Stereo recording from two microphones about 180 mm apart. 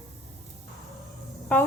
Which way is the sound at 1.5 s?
5° left (ahead or behind).